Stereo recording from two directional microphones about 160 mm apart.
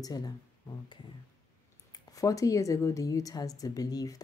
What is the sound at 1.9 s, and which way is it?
Speech, 20° left (ahead or behind).